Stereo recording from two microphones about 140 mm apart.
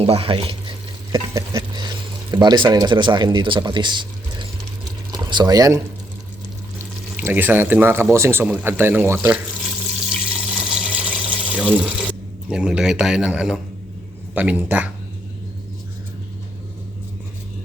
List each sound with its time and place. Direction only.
0.0 s speech: 40° right (ahead or behind)
1.1 s speech: 25° right (ahead or behind)
7.3 s speech: 15° right (ahead or behind)
10.2 s water: 5° right (ahead or behind)
12.5 s a man's voice: 5° right (ahead or behind)